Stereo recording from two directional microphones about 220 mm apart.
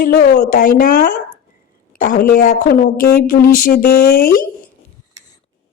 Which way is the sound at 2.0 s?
40° left (ahead or behind).